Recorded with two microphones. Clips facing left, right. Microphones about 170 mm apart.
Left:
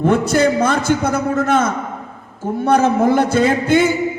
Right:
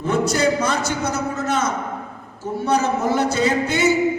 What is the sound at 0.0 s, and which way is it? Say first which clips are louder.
A man's voice: left 5 dB; 55° left (ahead or behind).